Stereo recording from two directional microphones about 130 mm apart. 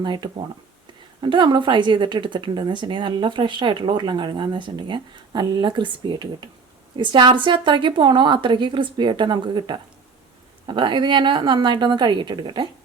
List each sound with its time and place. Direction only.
0.0 s speech: 35° right (ahead or behind)